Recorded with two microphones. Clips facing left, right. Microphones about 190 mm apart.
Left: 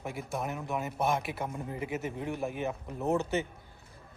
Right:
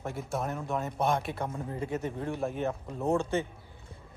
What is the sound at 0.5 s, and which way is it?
Speech, 15° left (ahead or behind).